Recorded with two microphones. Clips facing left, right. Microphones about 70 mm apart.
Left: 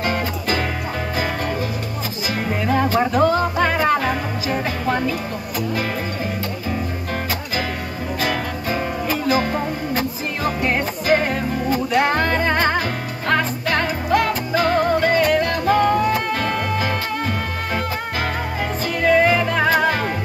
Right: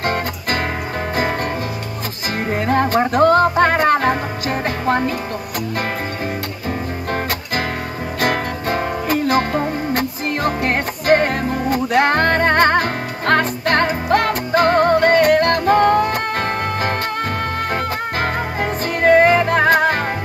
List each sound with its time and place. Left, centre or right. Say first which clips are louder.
0.0 s music: right 1 dB; right
8.2 s music: right 4 dB; right